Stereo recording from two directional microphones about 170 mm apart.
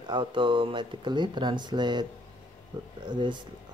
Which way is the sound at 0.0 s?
25° right (ahead or behind).